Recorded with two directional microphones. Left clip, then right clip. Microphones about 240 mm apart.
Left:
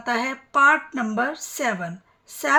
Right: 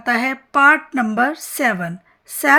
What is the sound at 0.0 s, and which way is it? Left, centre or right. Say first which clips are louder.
A woman's voice: right 6 dB; right.